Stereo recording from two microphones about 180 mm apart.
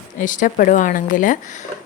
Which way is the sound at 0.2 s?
45° left (ahead or behind).